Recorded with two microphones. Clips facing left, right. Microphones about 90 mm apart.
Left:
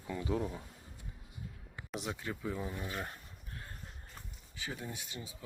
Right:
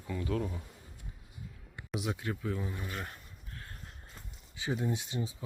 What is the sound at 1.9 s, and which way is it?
Speech, 5° right (ahead or behind).